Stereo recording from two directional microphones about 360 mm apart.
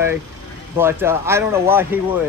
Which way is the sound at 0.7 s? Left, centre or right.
Centre.